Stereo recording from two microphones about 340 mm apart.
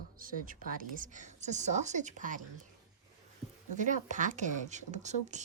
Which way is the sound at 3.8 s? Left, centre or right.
Right.